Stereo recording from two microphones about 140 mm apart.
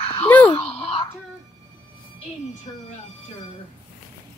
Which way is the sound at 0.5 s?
40° left (ahead or behind).